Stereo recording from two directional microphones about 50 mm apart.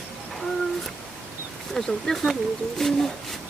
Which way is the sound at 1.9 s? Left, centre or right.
Centre.